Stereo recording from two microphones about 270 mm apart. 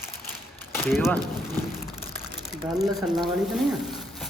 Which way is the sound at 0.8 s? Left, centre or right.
Centre.